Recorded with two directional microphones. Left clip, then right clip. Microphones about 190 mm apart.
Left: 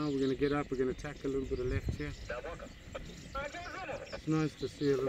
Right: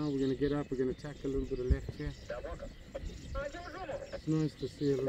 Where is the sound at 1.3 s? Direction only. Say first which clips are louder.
Even; 5° right (ahead or behind).